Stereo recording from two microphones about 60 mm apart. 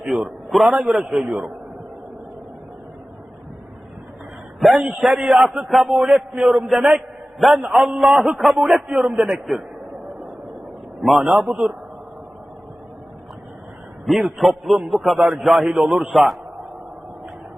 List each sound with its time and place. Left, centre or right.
0.1 s a sound: centre
0.7 s a man's voice: centre
4.8 s a man's voice: centre
6.1 s a man's voice: centre
7.3 s a man's voice: centre
7.6 s a man's voice: centre
9.0 s a man's voice: centre
11.0 s speech: centre
11.4 s a man's voice: centre
14.2 s speech: centre